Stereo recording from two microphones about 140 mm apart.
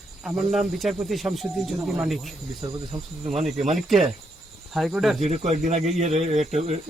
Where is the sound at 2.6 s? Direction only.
45° right (ahead or behind).